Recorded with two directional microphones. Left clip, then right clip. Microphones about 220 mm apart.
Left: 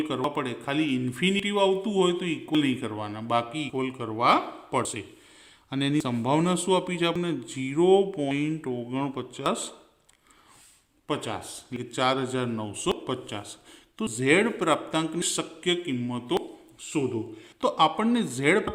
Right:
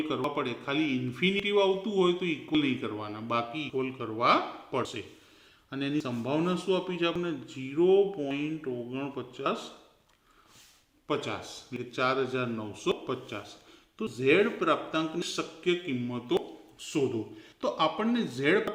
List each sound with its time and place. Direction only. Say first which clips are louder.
0.3 s a man's voice: left 2 dB; 35° left (ahead or behind)
11.1 s a man's voice: left 1 dB; 30° left (ahead or behind)
17.6 s a man's voice: left 5 dB; 40° left (ahead or behind)